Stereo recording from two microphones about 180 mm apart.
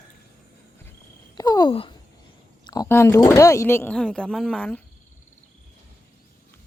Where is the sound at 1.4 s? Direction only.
20° left (ahead or behind).